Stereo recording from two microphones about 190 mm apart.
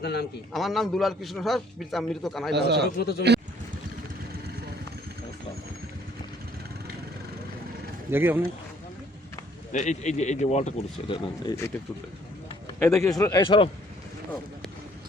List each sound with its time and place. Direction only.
0.0 s speech: 60° left (ahead or behind)
0.5 s a man's voice: centre (ahead or behind)
2.5 s speech: 60° right (ahead or behind)
3.0 s speech: 55° left (ahead or behind)
8.1 s speech: 10° right (ahead or behind)
9.7 s speech: 40° left (ahead or behind)
12.6 s a man's voice: 15° left (ahead or behind)